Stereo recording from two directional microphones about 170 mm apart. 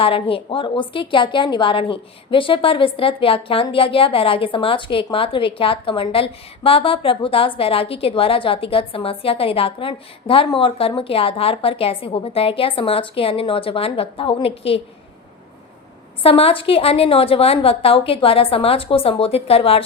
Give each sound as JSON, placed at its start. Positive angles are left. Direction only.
{"t": 0.0, "sound": "a woman's voice", "side_deg": 35}
{"t": 16.2, "sound": "a woman's voice", "side_deg": 35}